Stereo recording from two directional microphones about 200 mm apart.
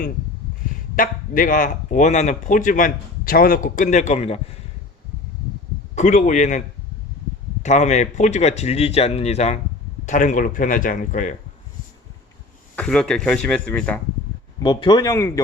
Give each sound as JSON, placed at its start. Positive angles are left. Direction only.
{"t": 0.9, "sound": "speech", "side_deg": 45}
{"t": 5.9, "sound": "speech", "side_deg": 35}
{"t": 7.6, "sound": "speech", "side_deg": 35}
{"t": 12.7, "sound": "speech", "side_deg": 5}
{"t": 14.6, "sound": "speech", "side_deg": 20}